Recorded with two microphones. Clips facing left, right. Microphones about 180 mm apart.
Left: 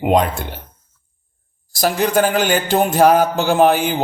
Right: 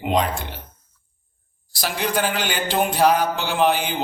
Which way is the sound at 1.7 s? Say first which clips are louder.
Left 7 dB; 45° left (ahead or behind).